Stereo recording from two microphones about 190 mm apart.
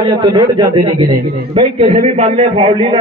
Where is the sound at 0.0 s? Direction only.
25° right (ahead or behind).